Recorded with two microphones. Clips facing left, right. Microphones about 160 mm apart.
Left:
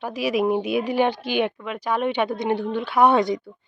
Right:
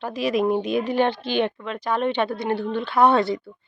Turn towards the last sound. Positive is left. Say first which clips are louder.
# even
turn(degrees=15)  # may be behind; listen again after turning